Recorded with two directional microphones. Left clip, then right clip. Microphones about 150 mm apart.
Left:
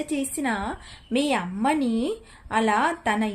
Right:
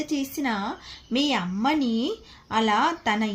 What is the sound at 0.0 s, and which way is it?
A woman's voice, 20° left (ahead or behind).